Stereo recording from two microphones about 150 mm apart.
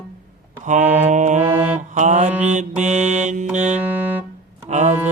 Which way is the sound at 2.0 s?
50° right (ahead or behind).